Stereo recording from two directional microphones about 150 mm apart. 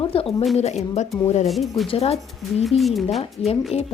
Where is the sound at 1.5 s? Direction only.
Centre (ahead or behind).